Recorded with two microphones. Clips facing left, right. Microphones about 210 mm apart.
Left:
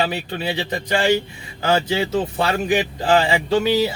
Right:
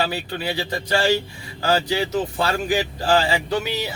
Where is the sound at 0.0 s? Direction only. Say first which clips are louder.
Left 2 dB; 20° left (ahead or behind).